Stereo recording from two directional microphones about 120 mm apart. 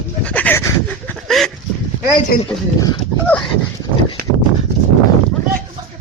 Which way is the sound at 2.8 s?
30° left (ahead or behind).